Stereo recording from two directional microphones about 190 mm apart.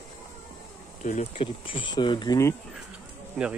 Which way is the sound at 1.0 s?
35° left (ahead or behind).